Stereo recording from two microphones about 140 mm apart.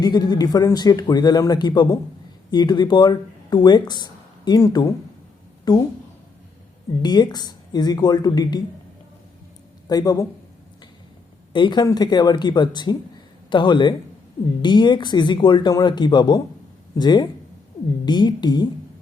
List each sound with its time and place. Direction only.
0.0 s a man's voice: 30° left (ahead or behind)
7.0 s a man's voice: 30° left (ahead or behind)
9.8 s speech: 25° left (ahead or behind)
11.5 s speech: 35° left (ahead or behind)